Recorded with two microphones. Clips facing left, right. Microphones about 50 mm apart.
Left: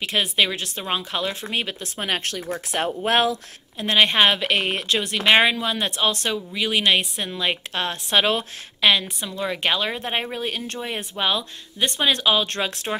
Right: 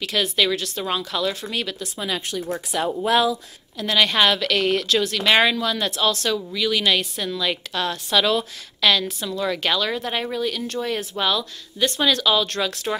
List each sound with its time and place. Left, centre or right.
0.0 s speech: left
2.0 s speech: left
3.7 s speech: left
10.8 s speech: left